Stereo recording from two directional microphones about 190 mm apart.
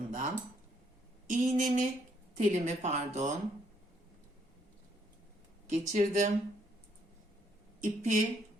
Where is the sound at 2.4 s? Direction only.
40° right (ahead or behind).